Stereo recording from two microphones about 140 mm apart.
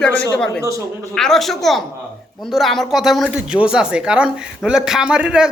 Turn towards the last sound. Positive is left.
turn(degrees=-5)  # may be behind; listen again after turning